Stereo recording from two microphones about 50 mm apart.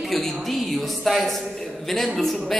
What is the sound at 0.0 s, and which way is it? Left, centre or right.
A woman's voice, centre.